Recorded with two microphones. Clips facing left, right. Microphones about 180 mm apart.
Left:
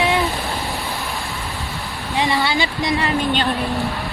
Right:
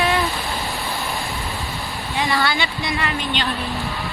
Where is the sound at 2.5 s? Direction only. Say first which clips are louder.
Left 4 dB; 35° left (ahead or behind).